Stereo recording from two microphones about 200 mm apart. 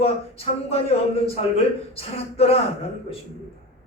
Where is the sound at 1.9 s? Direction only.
30° left (ahead or behind).